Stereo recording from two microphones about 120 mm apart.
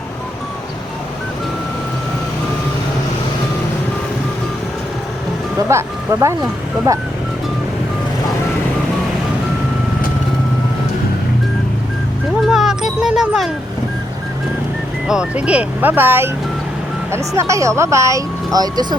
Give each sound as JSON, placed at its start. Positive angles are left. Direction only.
{"t": 5.6, "sound": "speech", "side_deg": -25}
{"t": 12.4, "sound": "a sound", "side_deg": -5}
{"t": 15.0, "sound": "speech", "side_deg": -5}